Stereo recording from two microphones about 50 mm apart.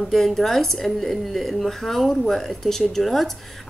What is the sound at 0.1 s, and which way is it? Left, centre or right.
A woman's voice, centre.